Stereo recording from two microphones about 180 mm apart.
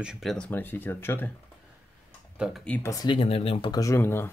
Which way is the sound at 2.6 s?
10° left (ahead or behind).